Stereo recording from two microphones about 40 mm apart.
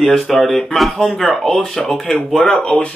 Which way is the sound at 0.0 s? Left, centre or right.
Centre.